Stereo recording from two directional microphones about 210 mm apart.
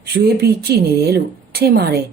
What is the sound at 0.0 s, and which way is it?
A woman's voice, 50° right (ahead or behind).